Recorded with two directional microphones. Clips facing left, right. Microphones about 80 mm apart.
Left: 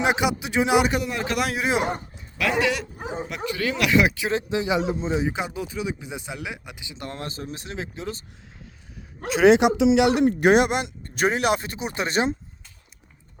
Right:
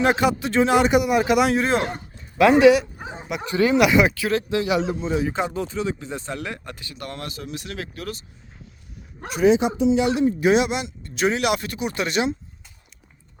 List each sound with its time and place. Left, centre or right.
0.0 s speech: centre
0.9 s speech: centre
1.4 s speech: centre
2.4 s speech: right
3.8 s speech: centre
4.1 s speech: left
5.3 s speech: centre; by 8.1 s left
9.3 s speech: left